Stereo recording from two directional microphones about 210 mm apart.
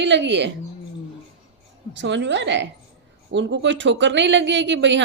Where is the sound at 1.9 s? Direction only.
60° right (ahead or behind).